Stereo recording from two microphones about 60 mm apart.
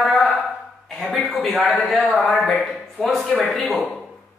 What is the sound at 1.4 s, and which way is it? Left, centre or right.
A man's voice, centre.